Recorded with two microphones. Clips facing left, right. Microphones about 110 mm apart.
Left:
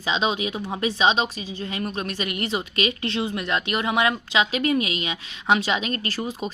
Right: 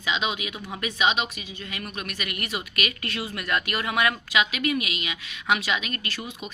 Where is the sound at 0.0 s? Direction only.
30° left (ahead or behind).